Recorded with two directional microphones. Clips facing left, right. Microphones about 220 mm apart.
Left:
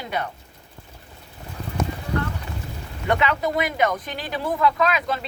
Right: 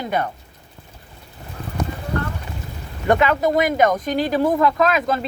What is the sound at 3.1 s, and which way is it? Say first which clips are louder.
Speech: right 5 dB; 45° right (ahead or behind).